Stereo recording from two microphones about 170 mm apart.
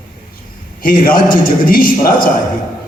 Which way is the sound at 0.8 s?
60° left (ahead or behind).